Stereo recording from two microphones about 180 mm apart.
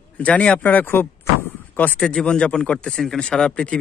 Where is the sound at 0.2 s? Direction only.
5° left (ahead or behind).